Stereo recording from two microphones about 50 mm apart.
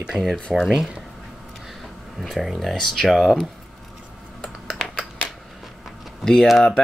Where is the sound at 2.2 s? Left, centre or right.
Centre.